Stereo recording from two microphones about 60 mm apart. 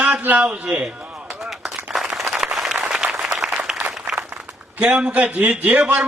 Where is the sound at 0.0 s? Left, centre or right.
Right.